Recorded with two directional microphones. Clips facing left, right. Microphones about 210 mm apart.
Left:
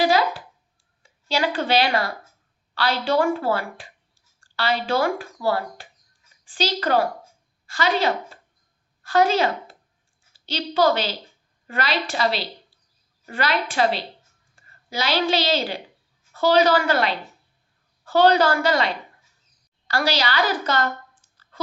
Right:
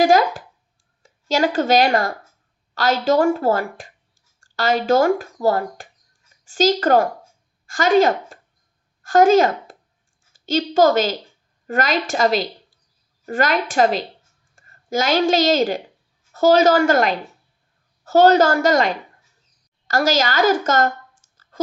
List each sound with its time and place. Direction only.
0.0 s a woman's voice: 45° right (ahead or behind)